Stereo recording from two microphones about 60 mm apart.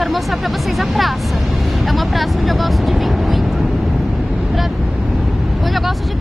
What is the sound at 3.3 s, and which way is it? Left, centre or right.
Vehicle, centre.